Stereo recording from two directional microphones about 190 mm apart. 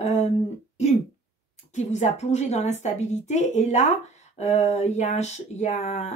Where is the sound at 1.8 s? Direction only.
35° left (ahead or behind).